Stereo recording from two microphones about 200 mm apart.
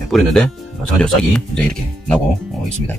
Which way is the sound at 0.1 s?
5° left (ahead or behind).